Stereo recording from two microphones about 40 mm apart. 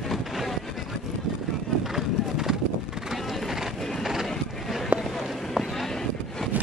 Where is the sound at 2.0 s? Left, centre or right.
Centre.